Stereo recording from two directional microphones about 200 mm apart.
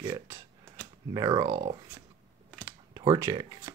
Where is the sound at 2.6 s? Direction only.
20° right (ahead or behind).